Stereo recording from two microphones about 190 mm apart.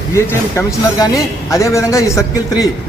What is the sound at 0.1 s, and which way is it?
A man's voice, 15° left (ahead or behind).